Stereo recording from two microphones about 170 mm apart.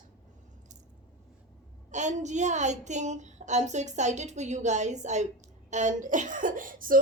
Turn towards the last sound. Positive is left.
turn(degrees=-55)  # may be behind; listen again after turning